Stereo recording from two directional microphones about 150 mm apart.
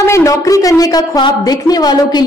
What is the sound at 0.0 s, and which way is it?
A woman's voice, 20° left (ahead or behind).